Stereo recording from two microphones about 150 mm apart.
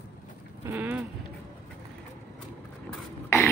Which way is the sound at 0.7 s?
10° right (ahead or behind).